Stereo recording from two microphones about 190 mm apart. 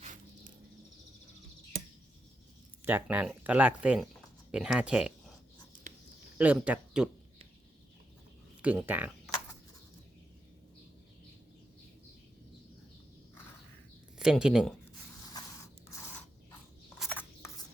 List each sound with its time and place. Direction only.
0.0 s insect: 40° right (ahead or behind)
2.8 s speech: 10° right (ahead or behind)
6.4 s speech: 5° right (ahead or behind)
8.6 s speech: 10° right (ahead or behind)
14.2 s speech: 5° right (ahead or behind)
17.0 s rub: 5° left (ahead or behind)